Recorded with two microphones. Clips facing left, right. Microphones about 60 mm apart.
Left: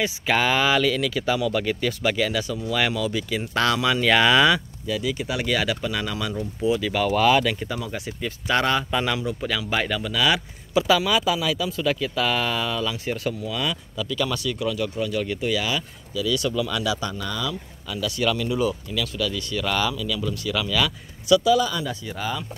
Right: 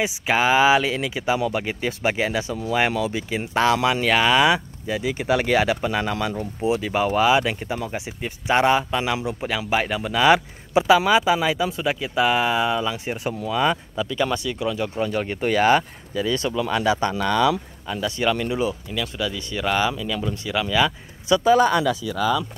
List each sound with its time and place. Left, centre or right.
0.0 s speech: centre
4.1 s speech: centre
4.8 s speech: right
7.2 s speech: centre
7.4 s speech: right
9.9 s speech: right
13.3 s speech: right
17.2 s speech: right
17.8 s speech: right
21.5 s speech: right